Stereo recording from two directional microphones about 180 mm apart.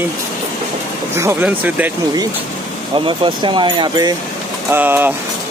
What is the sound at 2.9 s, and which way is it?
Speech, 25° right (ahead or behind).